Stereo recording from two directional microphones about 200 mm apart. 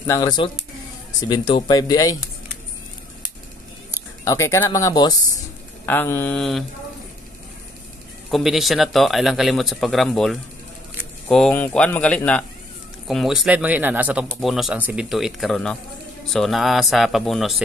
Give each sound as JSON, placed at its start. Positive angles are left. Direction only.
{"t": 0.0, "sound": "speech", "side_deg": 15}
{"t": 3.9, "sound": "speech", "side_deg": 15}
{"t": 8.3, "sound": "a man's voice", "side_deg": 0}